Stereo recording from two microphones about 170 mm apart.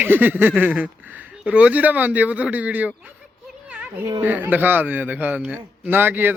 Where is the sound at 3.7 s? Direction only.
5° right (ahead or behind).